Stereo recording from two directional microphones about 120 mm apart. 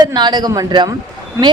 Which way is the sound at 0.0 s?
35° right (ahead or behind).